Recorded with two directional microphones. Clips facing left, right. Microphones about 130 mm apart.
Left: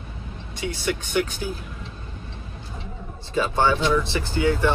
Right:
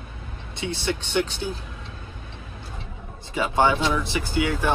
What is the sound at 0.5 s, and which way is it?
Speech, 25° right (ahead or behind).